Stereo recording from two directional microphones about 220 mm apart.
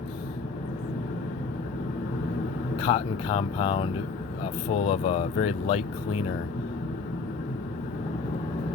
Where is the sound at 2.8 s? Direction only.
25° left (ahead or behind).